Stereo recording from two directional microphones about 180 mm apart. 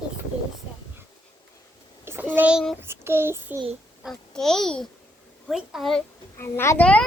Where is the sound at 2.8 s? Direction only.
15° right (ahead or behind).